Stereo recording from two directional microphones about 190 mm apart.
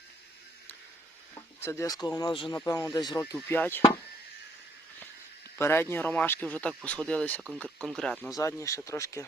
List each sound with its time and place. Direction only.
1.4 s speech: 15° left (ahead or behind)
3.3 s speech: 10° left (ahead or behind)
5.5 s speech: 10° left (ahead or behind)
8.4 s speech: 15° left (ahead or behind)